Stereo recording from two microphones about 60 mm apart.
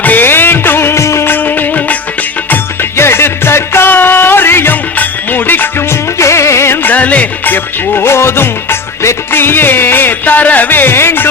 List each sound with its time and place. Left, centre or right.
0.0 s music of bollywood: left
1.3 s music: left
3.0 s music: left
5.9 s music of bollywood: left
6.8 s music: left